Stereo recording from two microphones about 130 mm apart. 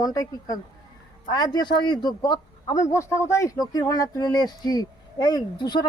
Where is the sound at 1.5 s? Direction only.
35° left (ahead or behind).